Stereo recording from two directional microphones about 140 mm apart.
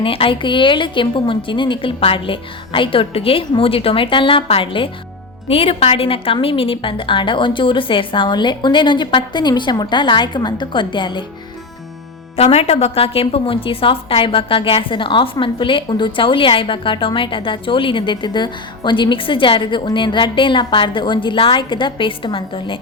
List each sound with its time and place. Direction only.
0.0 s a woman's voice: 40° left (ahead or behind)
12.4 s a woman's voice: 45° left (ahead or behind)